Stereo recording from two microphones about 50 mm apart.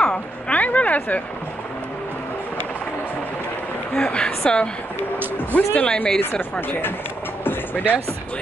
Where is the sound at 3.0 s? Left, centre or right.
Left.